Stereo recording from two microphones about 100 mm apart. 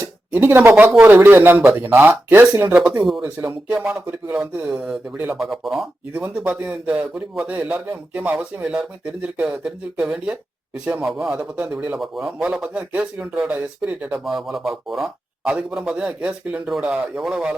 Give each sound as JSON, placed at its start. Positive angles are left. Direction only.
{"t": 0.0, "sound": "speech", "side_deg": -20}
{"t": 5.4, "sound": "speech", "side_deg": 0}
{"t": 6.1, "sound": "speech", "side_deg": -15}
{"t": 11.9, "sound": "speech", "side_deg": 0}
{"t": 14.3, "sound": "speech", "side_deg": 0}